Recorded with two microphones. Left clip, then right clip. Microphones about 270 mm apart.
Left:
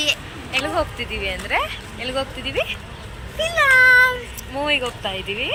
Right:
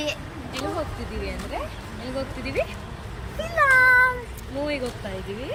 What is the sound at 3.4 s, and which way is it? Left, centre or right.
Speech, centre.